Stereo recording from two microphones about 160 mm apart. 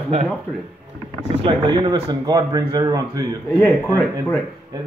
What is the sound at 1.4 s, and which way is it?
Speech, 25° right (ahead or behind).